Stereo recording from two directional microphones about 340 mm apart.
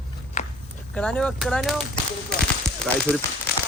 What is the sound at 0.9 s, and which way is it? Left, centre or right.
Speech, centre.